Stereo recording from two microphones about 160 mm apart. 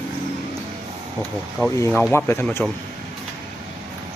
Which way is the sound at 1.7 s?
20° left (ahead or behind).